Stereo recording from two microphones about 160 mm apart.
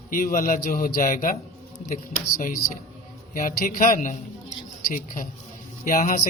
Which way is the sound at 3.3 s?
55° left (ahead or behind).